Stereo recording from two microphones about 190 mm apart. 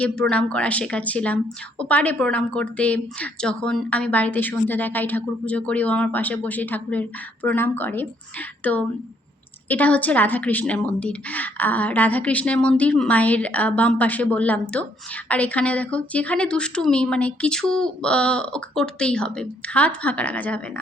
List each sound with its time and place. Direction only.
0.0 s a woman's voice: 5° left (ahead or behind)